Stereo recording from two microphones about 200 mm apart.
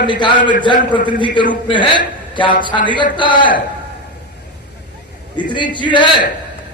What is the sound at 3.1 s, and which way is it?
Speech, 25° left (ahead or behind).